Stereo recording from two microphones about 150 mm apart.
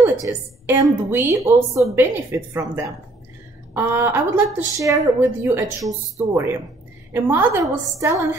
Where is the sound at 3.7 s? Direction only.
15° right (ahead or behind).